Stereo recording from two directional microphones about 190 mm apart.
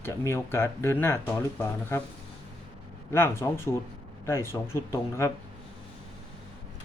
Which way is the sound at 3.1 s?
15° left (ahead or behind).